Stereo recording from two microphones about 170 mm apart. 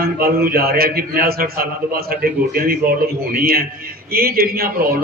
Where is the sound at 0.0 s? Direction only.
60° right (ahead or behind).